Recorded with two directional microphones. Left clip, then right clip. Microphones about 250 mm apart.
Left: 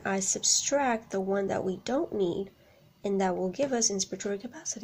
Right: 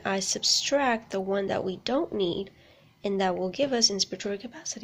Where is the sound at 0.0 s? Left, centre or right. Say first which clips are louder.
Right 2 dB; centre.